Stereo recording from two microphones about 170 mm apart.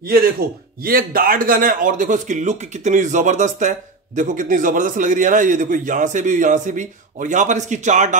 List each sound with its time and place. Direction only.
0.8 s a man's voice: 60° right (ahead or behind)